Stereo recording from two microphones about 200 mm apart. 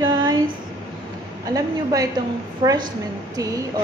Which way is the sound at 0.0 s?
20° right (ahead or behind).